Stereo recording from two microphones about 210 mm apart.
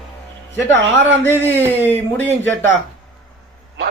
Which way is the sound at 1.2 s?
10° left (ahead or behind).